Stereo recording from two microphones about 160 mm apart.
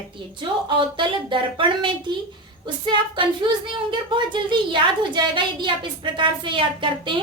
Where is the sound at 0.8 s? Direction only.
30° right (ahead or behind).